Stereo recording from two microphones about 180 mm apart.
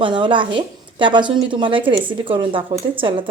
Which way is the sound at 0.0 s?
25° right (ahead or behind).